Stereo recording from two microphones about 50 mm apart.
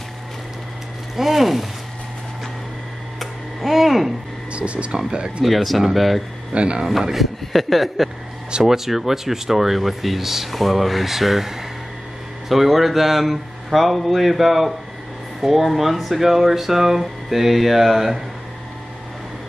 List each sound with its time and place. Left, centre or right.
1.1 s speech: centre
3.2 s a sound: centre
4.5 s speech: right
5.4 s speech: centre
6.5 s speech: right
6.9 s speech: centre